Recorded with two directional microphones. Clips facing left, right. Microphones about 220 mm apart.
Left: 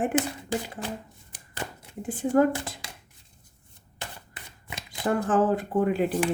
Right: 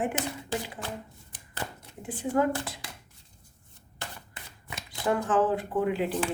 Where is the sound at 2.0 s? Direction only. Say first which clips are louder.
Left 5 dB; 45° left (ahead or behind).